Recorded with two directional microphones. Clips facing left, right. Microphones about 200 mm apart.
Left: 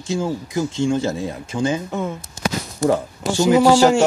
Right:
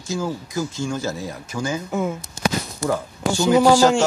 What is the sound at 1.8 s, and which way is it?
Speech, centre (ahead or behind).